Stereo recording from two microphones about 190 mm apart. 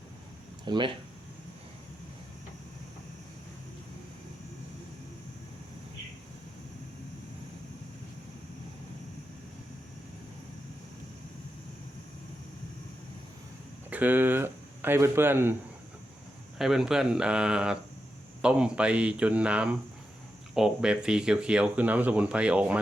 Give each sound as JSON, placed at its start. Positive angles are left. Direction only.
{"t": 0.6, "sound": "speech", "side_deg": -25}
{"t": 13.9, "sound": "speech", "side_deg": -10}
{"t": 16.6, "sound": "speech", "side_deg": -5}